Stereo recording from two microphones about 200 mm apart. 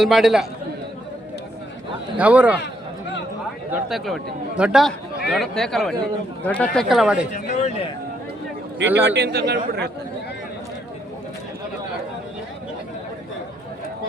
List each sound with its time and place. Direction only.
0.0 s a man's voice: centre (ahead or behind)
2.1 s a man's voice: 5° right (ahead or behind)
3.7 s a man's voice: centre (ahead or behind)
7.5 s speech: 35° left (ahead or behind)
9.0 s a man's voice: 55° right (ahead or behind)